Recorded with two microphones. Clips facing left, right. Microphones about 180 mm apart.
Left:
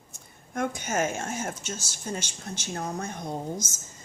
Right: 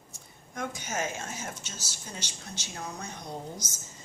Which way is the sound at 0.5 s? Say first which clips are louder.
Left 6 dB; 50° left (ahead or behind).